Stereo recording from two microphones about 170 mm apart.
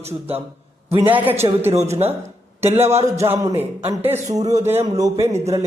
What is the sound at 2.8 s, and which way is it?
Speech, 15° right (ahead or behind).